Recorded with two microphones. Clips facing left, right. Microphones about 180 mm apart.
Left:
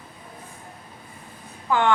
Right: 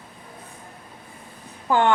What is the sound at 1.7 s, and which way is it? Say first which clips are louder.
Speech: right 2 dB; 35° right (ahead or behind).